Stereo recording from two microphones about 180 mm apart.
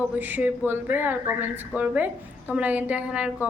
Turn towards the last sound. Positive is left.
turn(degrees=-5)  # may be behind; listen again after turning